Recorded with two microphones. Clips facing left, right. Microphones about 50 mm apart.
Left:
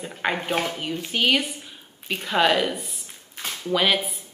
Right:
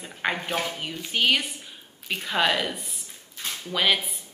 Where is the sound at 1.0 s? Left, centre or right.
Centre.